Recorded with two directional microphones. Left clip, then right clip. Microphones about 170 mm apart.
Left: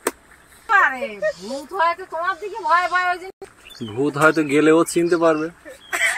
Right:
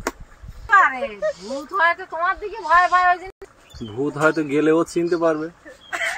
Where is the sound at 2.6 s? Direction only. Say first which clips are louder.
Right 3 dB; 55° left (ahead or behind).